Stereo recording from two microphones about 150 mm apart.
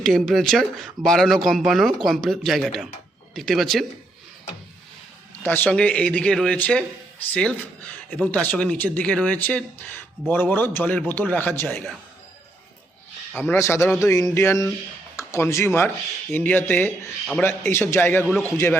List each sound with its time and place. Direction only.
0.0 s speech: centre (ahead or behind)
5.4 s speech: 10° left (ahead or behind)
13.3 s speech: 10° left (ahead or behind)
14.0 s a sound: 20° left (ahead or behind)
14.3 s speech: 20° left (ahead or behind)